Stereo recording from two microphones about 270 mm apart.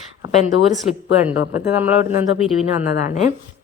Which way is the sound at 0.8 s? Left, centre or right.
Centre.